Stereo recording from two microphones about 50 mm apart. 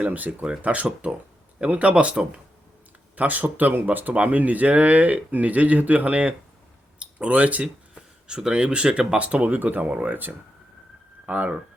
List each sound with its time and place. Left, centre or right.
0.0 s speech: right
8.3 s speech: centre; by 10.3 s right
11.3 s speech: right